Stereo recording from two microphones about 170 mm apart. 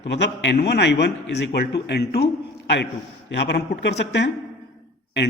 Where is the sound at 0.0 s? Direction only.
90° left.